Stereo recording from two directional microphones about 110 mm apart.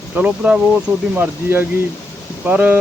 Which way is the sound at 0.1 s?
10° right (ahead or behind).